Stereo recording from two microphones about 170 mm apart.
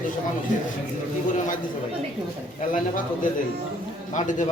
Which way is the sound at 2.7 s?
50° left (ahead or behind).